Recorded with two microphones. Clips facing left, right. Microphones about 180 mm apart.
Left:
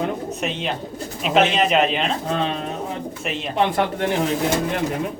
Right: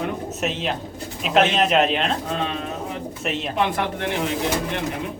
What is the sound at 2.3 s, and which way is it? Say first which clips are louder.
Speech: left 3 dB; 35° left (ahead or behind).